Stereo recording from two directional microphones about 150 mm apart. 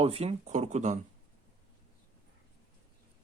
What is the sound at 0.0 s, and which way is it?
Speech, 40° right (ahead or behind).